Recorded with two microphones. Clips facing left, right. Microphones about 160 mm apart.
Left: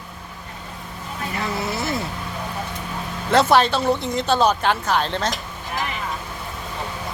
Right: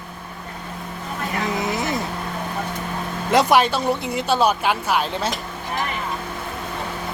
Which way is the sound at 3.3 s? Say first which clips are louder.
Even; 10° right (ahead or behind).